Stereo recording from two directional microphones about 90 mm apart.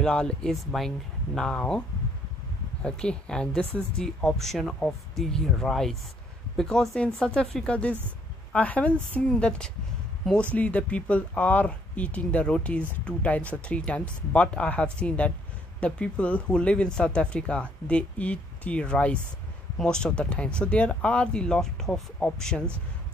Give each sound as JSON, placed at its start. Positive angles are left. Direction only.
{"t": 0.0, "sound": "speech", "side_deg": 10}
{"t": 2.8, "sound": "speech", "side_deg": 10}